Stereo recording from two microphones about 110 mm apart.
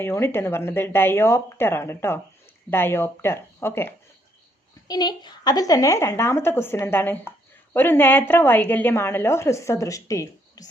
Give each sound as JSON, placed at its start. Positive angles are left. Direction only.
{"t": 0.0, "sound": "a woman's voice", "side_deg": 20}
{"t": 4.9, "sound": "a woman's voice", "side_deg": 40}